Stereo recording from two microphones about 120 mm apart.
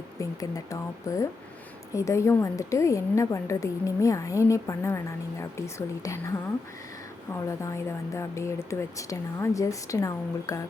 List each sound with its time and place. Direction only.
0.2 s a woman's voice: 30° left (ahead or behind)
7.4 s a woman's voice: 25° left (ahead or behind)